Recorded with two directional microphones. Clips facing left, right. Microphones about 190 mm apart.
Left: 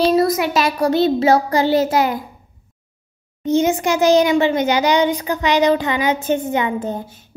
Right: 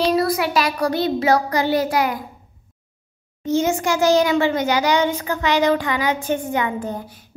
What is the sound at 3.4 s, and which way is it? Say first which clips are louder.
A child's voice: left 3 dB; 20° left (ahead or behind).